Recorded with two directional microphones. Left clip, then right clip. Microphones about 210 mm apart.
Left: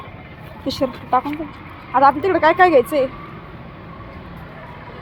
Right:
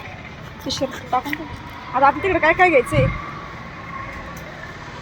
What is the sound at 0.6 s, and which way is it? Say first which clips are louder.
A woman's voice: left 2 dB; 25° left (ahead or behind).